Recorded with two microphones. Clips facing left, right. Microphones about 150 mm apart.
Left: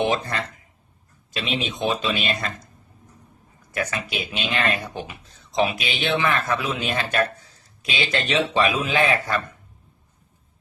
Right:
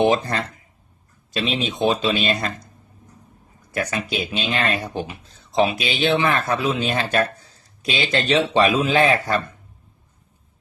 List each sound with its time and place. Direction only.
0.0 s speech: 40° right (ahead or behind)
3.8 s speech: 35° right (ahead or behind)